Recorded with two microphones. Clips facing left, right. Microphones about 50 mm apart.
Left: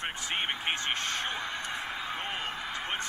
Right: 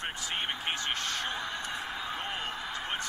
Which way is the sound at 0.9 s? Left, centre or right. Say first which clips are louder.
Left 1 dB; left.